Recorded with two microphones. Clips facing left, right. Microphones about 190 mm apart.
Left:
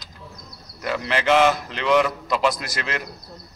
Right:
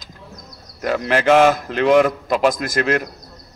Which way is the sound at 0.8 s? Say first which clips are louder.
Right 5 dB; 50° right (ahead or behind).